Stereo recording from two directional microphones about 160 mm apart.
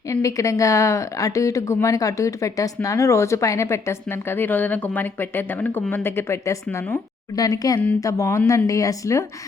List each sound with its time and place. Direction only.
0.1 s a woman's voice: 20° left (ahead or behind)